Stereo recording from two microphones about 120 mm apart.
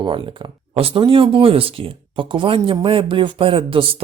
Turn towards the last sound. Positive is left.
turn(degrees=-50)  # may be behind; listen again after turning